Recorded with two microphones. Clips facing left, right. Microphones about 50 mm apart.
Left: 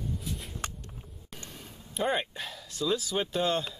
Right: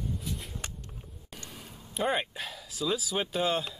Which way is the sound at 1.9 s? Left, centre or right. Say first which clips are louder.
Even; centre.